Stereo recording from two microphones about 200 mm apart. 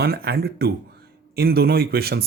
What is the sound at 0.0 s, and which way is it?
Speech, 50° right (ahead or behind).